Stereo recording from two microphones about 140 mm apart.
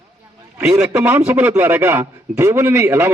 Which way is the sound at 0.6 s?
10° right (ahead or behind).